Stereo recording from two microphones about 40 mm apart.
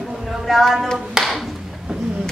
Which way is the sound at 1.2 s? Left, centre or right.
Centre.